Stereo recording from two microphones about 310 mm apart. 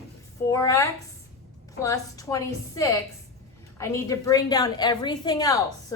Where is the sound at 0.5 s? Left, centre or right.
Centre.